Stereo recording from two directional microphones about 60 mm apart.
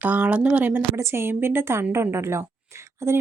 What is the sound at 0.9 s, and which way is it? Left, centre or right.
Speech, right.